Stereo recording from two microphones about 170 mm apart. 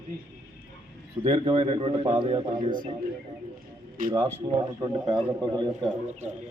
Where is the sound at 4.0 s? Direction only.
55° right (ahead or behind).